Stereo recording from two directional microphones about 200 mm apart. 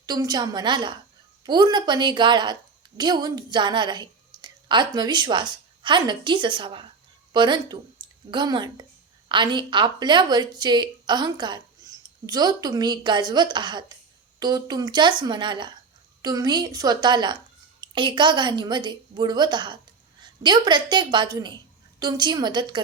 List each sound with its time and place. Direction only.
0.0 s a woman's voice: 20° right (ahead or behind)